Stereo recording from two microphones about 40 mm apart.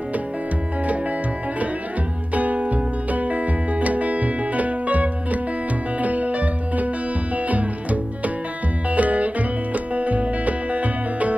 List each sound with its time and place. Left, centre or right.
2.3 s music: right